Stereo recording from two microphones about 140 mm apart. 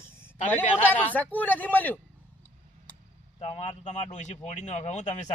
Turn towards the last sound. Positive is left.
turn(degrees=55)  # may be behind; listen again after turning